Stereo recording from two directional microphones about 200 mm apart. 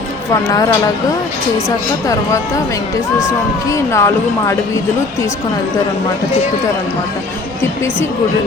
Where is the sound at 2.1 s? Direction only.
15° left (ahead or behind).